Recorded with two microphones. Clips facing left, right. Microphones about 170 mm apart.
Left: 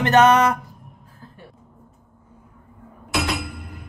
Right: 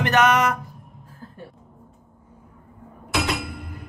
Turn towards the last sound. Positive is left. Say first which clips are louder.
# even
turn(degrees=0)  # may be behind; listen again after turning